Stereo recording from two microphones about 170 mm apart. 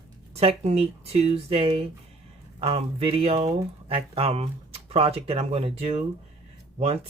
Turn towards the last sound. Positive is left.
turn(degrees=-35)  # may be behind; listen again after turning